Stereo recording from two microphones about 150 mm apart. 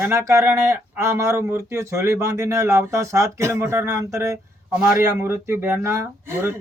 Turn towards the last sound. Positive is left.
turn(degrees=-15)  # may be behind; listen again after turning